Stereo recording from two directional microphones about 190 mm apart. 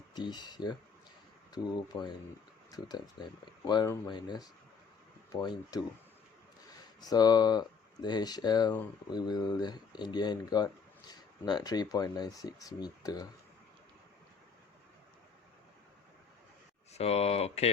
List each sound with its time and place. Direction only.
0.1 s speech: 20° left (ahead or behind)
7.0 s speech: 20° left (ahead or behind)
16.9 s speech: 35° left (ahead or behind)